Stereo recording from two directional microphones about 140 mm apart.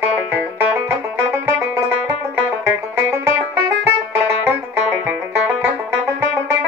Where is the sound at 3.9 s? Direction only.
15° right (ahead or behind).